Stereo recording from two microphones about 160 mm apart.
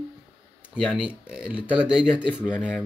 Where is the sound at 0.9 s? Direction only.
5° right (ahead or behind).